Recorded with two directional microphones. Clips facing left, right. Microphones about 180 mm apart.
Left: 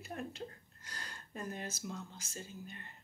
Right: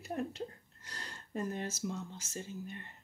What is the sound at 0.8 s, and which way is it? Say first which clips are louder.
Speech: right 1 dB; 30° right (ahead or behind).